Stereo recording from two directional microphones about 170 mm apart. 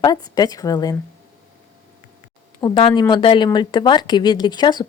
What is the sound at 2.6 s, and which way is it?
A woman's voice, 30° left (ahead or behind).